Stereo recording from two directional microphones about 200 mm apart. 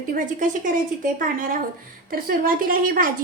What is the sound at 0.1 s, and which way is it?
A woman's voice, 40° right (ahead or behind).